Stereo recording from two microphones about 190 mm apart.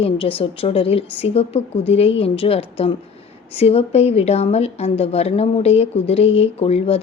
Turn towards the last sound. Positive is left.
turn(degrees=30)  # may be behind; listen again after turning